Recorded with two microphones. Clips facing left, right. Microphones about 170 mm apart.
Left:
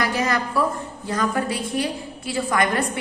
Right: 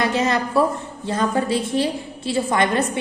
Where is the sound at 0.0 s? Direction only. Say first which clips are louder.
Right 3 dB; 25° right (ahead or behind).